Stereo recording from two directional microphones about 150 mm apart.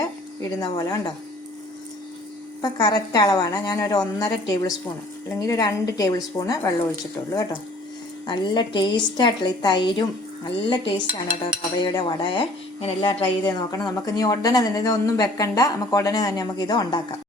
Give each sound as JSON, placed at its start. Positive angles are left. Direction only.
{"t": 0.6, "sound": "cutlery", "side_deg": 25}
{"t": 2.6, "sound": "cutlery", "side_deg": 25}
{"t": 8.3, "sound": "cutlery", "side_deg": 30}